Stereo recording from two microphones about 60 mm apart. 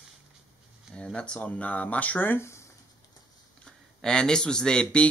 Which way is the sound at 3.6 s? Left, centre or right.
Centre.